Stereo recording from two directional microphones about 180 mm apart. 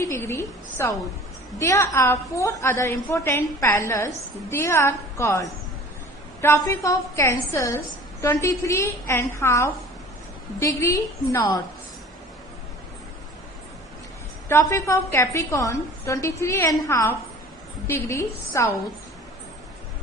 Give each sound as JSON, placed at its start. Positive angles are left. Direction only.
{"t": 0.0, "sound": "a woman's voice", "side_deg": 15}
{"t": 14.4, "sound": "a woman's voice", "side_deg": 15}